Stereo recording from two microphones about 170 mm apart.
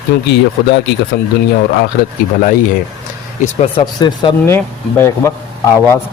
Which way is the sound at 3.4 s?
35° left (ahead or behind).